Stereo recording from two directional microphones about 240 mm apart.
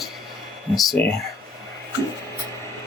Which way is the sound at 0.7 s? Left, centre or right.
Centre.